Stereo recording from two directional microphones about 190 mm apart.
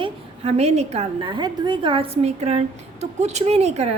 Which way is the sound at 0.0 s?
35° right (ahead or behind).